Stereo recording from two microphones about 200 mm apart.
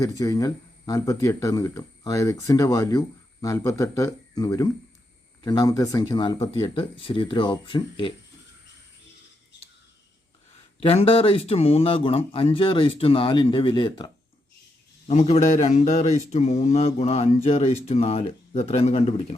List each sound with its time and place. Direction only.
0.0 s speech: 15° left (ahead or behind)
10.8 s speech: 30° left (ahead or behind)
15.0 s speech: 35° left (ahead or behind)